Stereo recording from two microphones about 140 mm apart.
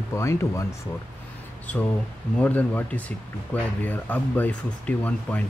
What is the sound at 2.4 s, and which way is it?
Speech, 10° left (ahead or behind).